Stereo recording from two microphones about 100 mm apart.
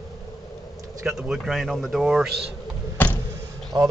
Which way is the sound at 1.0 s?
5° right (ahead or behind).